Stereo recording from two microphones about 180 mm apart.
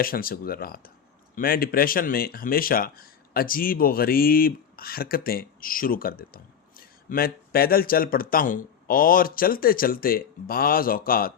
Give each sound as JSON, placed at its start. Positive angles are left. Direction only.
{"t": 0.0, "sound": "speech", "side_deg": 55}